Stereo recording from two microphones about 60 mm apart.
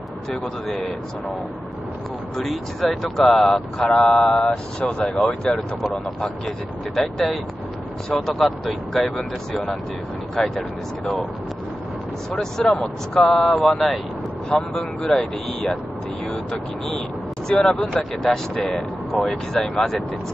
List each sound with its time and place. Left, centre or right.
0.7 s speech: centre
2.3 s speech: centre
4.4 s speech: centre
8.1 s speech: centre
12.3 s speech: centre
17.5 s speech: centre